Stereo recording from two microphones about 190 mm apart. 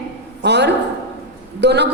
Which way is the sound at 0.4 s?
60° right (ahead or behind).